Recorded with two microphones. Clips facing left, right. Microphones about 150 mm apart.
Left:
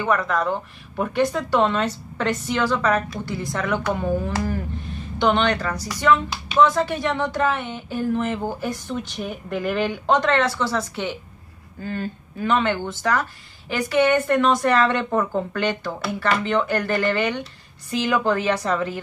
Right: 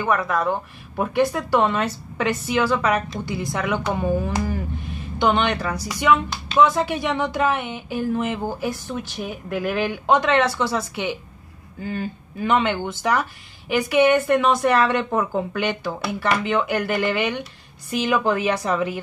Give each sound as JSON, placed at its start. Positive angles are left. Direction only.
{"t": 0.0, "sound": "speech", "side_deg": -5}